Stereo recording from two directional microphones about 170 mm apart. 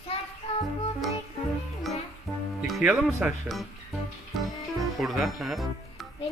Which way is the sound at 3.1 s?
15° right (ahead or behind).